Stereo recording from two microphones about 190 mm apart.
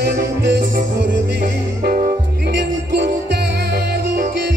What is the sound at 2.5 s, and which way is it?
Music, 65° right (ahead or behind).